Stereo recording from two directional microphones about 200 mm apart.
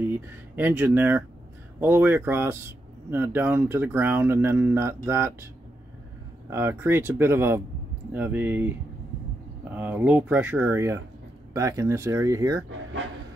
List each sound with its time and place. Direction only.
0.0 s speech: 10° right (ahead or behind)
6.5 s speech: 10° right (ahead or behind)